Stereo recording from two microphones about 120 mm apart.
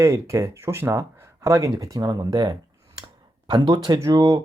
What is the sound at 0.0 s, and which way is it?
A man's voice, 25° right (ahead or behind).